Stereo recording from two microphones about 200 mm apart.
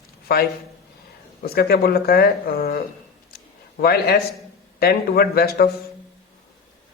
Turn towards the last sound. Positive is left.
turn(degrees=50)  # may be behind; listen again after turning